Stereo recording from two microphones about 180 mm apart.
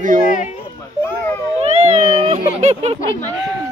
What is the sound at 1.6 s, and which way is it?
Speech, 35° right (ahead or behind).